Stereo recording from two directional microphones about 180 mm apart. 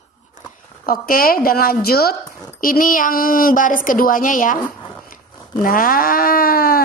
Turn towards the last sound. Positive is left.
turn(degrees=55)  # may be behind; listen again after turning